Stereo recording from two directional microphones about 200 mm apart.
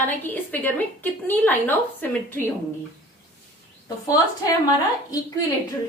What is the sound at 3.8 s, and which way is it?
A woman's voice, 20° left (ahead or behind).